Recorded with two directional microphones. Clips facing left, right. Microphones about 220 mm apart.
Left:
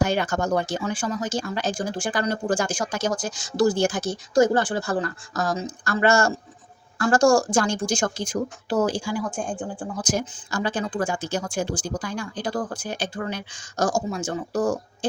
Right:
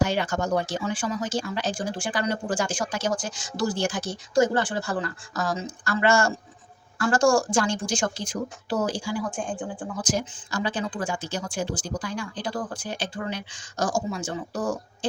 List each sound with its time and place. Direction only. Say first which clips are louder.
0.0 s speech: left 2 dB; 50° left (ahead or behind)